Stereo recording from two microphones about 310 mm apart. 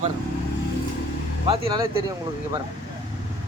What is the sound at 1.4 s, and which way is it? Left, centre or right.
Speech, centre.